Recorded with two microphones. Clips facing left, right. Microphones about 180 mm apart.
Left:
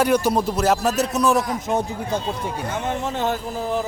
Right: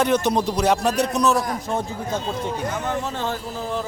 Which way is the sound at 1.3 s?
20° left (ahead or behind).